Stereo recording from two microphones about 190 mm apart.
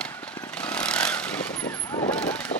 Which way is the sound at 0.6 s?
5° left (ahead or behind).